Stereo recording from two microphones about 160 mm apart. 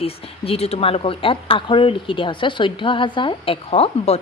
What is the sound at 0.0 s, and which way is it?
Speech, 40° left (ahead or behind).